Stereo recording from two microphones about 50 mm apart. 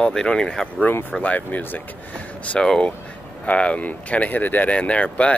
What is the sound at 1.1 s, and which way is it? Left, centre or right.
Speech, left.